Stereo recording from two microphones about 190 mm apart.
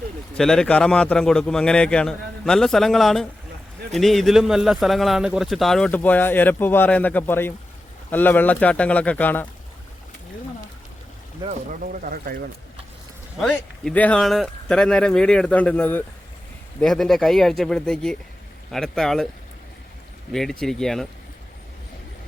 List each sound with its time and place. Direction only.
0.3 s a man's voice: 5° left (ahead or behind)
11.4 s speech: 45° right (ahead or behind)
13.4 s a man's voice: 5° left (ahead or behind)
20.3 s a man's voice: centre (ahead or behind)